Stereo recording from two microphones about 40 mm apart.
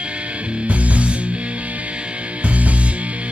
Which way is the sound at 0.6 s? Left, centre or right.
Right.